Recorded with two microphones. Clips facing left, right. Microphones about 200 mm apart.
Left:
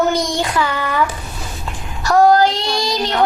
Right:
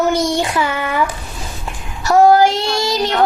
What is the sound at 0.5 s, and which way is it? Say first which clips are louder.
Speech: even; 25° right (ahead or behind).